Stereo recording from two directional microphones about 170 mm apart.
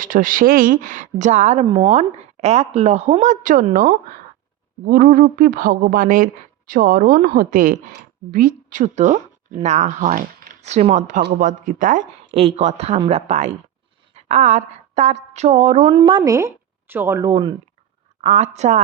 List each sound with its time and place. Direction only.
0.0 s speech: 55° right (ahead or behind)
10.6 s speech: 40° right (ahead or behind)
12.3 s a woman's voice: 35° right (ahead or behind)
16.0 s a woman's voice: 30° right (ahead or behind)
18.2 s speech: 40° right (ahead or behind)